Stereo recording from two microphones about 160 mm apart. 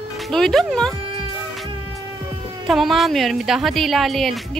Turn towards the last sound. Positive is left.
turn(degrees=0)  # may be behind; listen again after turning